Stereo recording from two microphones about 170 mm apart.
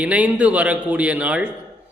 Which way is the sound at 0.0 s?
5° right (ahead or behind).